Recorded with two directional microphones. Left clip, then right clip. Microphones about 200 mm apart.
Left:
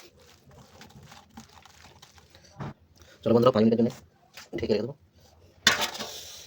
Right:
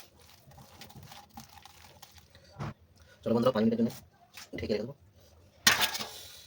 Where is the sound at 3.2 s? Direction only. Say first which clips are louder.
Left 7 dB; 40° left (ahead or behind).